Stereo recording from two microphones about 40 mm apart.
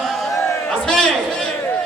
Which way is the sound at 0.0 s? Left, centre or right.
Centre.